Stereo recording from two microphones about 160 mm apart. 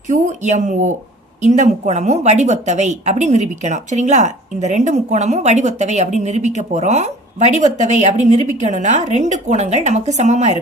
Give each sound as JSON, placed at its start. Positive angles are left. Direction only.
{"t": 0.1, "sound": "speech", "side_deg": -50}